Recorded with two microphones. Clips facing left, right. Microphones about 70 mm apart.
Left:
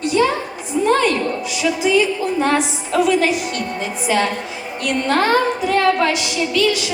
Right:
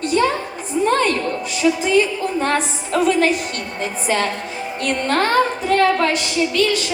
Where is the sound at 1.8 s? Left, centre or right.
Right.